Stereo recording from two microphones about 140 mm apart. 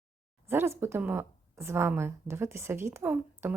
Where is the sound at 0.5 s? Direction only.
15° right (ahead or behind).